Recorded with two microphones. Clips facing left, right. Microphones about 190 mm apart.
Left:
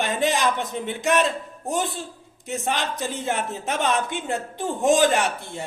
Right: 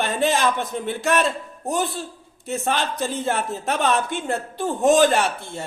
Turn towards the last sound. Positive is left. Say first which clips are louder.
# right 2 dB
turn(degrees=15)  # may be behind; listen again after turning